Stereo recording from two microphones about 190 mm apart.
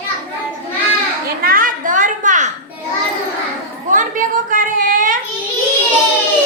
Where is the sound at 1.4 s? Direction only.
50° right (ahead or behind).